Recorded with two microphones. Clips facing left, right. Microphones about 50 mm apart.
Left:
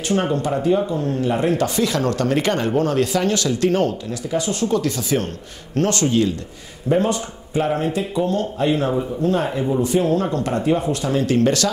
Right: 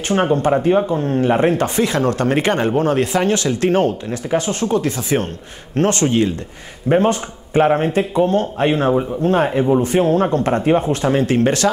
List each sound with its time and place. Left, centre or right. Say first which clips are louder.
0.1 s speech: right 5 dB; right